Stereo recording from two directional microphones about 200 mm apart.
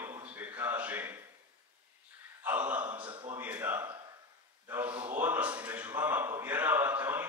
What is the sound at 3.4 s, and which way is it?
A man's voice, 10° right (ahead or behind).